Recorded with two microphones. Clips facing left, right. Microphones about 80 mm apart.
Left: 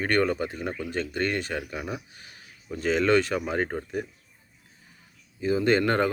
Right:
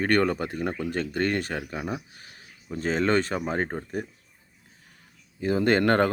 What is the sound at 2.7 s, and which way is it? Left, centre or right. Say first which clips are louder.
Speech: left 1 dB; right.